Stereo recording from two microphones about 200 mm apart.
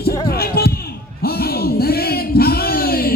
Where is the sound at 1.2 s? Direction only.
50° left (ahead or behind).